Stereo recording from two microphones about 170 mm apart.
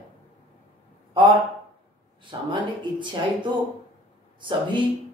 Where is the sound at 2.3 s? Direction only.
25° right (ahead or behind).